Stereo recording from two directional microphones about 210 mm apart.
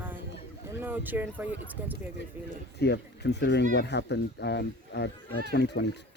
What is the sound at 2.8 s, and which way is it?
Speech, 55° left (ahead or behind).